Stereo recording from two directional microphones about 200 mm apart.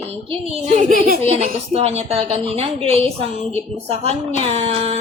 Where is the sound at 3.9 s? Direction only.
30° right (ahead or behind).